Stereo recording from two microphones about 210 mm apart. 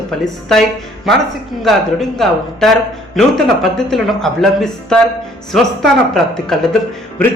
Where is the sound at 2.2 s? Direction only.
Centre (ahead or behind).